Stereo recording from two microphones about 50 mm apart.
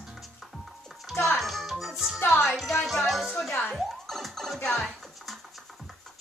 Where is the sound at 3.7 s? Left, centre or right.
Centre.